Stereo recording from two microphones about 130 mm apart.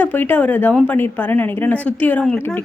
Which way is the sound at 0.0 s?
15° left (ahead or behind).